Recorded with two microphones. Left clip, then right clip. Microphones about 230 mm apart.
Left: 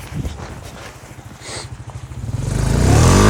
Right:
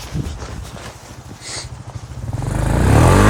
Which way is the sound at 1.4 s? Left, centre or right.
Centre.